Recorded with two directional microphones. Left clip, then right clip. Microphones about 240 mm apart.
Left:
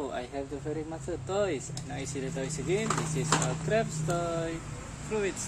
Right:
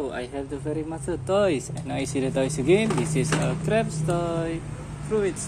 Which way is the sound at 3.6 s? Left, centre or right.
Centre.